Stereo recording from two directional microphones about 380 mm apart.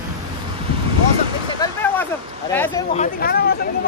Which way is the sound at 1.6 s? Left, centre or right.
Centre.